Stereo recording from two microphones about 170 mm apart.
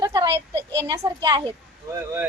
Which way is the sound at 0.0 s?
20° right (ahead or behind).